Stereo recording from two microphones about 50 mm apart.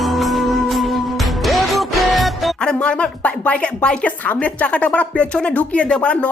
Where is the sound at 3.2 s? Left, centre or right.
Left.